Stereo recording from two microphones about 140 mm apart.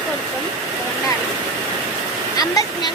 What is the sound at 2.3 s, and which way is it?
Speech, 25° left (ahead or behind).